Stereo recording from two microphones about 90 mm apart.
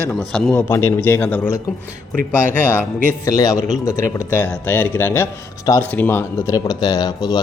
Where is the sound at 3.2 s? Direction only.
40° left (ahead or behind).